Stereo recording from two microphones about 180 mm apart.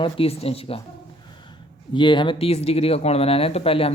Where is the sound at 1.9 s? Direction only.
25° left (ahead or behind).